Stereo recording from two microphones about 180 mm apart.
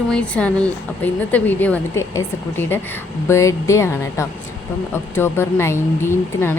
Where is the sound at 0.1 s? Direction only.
5° left (ahead or behind).